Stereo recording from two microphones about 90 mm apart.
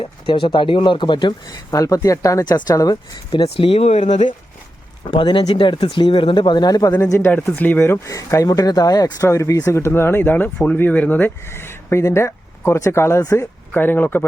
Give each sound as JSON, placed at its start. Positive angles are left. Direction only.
{"t": 0.0, "sound": "speech", "side_deg": 70}
{"t": 1.7, "sound": "speech", "side_deg": 40}
{"t": 5.0, "sound": "speech", "side_deg": 65}
{"t": 7.0, "sound": "speech", "side_deg": 35}
{"t": 7.3, "sound": "speech", "side_deg": 20}
{"t": 8.1, "sound": "speech", "side_deg": 40}
{"t": 9.2, "sound": "speech", "side_deg": 35}
{"t": 13.7, "sound": "speech", "side_deg": 25}